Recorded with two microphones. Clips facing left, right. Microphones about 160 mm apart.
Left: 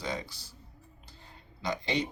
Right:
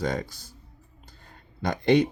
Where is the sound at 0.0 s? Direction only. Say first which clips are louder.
Right 7 dB; 50° right (ahead or behind).